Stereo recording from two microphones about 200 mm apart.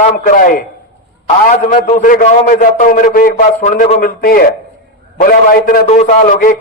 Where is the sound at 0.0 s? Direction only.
40° left (ahead or behind).